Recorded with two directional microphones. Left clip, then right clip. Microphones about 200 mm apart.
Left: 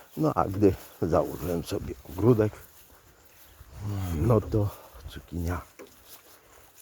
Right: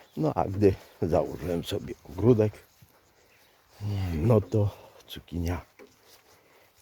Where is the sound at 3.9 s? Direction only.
25° right (ahead or behind).